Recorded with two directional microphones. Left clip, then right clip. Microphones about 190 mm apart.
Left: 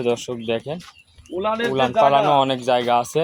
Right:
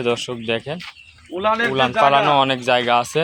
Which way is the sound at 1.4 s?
25° right (ahead or behind).